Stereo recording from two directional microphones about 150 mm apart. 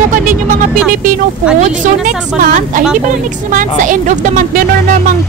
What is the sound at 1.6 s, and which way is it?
A woman's voice, 60° right (ahead or behind).